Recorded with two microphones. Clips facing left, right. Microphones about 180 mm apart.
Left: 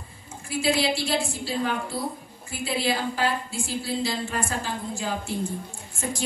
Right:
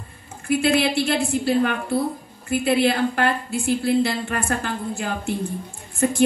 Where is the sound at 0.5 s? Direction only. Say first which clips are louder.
Right 5 dB; 60° right (ahead or behind).